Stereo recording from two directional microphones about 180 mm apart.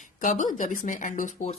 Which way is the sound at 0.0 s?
45° left (ahead or behind).